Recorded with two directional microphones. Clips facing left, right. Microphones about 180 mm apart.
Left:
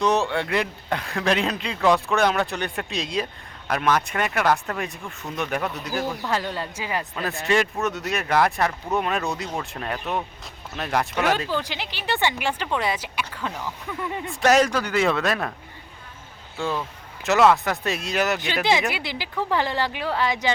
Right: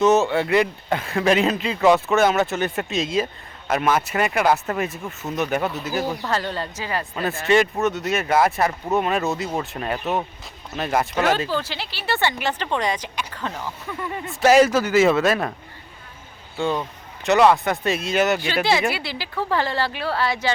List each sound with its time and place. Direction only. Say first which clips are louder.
0.0 s speech: right 5 dB; 5° right (ahead or behind)
5.0 s speech: right 5 dB; 20° right (ahead or behind)
5.4 s speech: right 4 dB; centre (ahead or behind)
6.2 s speech: right 1 dB; 10° left (ahead or behind)
7.2 s speech: right 5 dB; centre (ahead or behind)
11.5 s speech: right 1 dB; 15° left (ahead or behind)
14.3 s speech: right 4 dB; 5° right (ahead or behind)
17.2 s speech: right 2 dB; centre (ahead or behind)
18.3 s speech: right 2 dB; 20° left (ahead or behind)